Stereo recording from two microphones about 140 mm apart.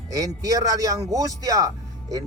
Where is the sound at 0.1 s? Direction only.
25° right (ahead or behind).